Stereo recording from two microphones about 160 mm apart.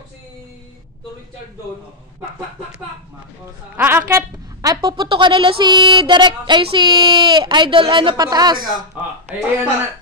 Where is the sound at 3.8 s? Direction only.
15° right (ahead or behind).